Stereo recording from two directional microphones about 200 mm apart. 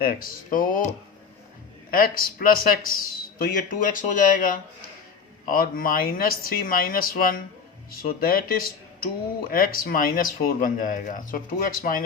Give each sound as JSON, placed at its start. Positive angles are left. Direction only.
{"t": 0.0, "sound": "a man's voice", "side_deg": 45}
{"t": 1.9, "sound": "a man's voice", "side_deg": 45}